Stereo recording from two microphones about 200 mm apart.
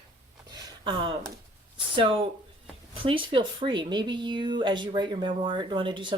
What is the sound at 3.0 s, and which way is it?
Speech, 25° right (ahead or behind).